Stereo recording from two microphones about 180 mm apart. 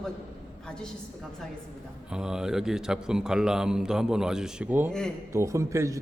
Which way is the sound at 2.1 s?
5° right (ahead or behind).